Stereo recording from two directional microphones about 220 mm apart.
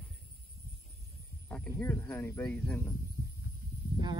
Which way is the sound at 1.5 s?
5° left (ahead or behind).